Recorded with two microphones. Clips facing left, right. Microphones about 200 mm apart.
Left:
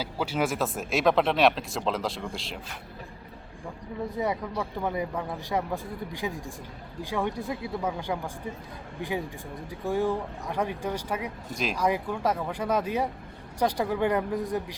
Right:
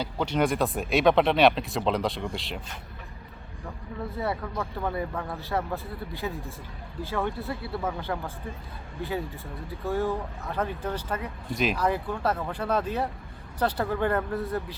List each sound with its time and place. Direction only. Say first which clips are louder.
0.0 s speech: right 2 dB; 5° left (ahead or behind)
4.1 s speech: left 1 dB; 15° left (ahead or behind)
11.5 s speech: right 5 dB; centre (ahead or behind)
11.8 s speech: even; 10° left (ahead or behind)